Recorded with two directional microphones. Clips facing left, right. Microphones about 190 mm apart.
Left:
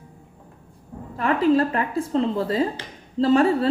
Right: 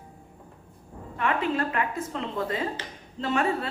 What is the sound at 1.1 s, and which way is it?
A woman's voice, 35° left (ahead or behind).